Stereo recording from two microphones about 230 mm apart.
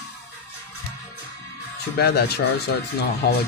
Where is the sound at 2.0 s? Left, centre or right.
Left.